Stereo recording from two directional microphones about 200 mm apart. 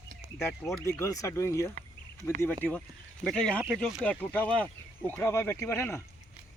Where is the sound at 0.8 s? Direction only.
15° left (ahead or behind).